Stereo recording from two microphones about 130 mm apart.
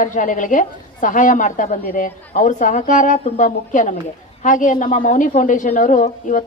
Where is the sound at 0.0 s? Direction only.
90° left.